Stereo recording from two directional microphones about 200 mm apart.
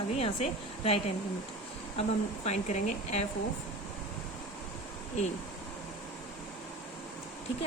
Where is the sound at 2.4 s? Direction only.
35° left (ahead or behind).